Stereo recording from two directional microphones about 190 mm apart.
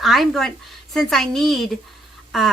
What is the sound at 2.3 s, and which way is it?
Duck, centre (ahead or behind).